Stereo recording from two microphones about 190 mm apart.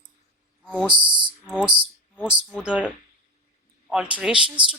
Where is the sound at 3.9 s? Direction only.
5° right (ahead or behind).